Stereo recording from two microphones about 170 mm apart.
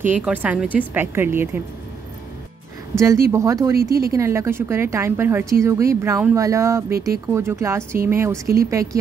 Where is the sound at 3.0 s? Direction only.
15° right (ahead or behind).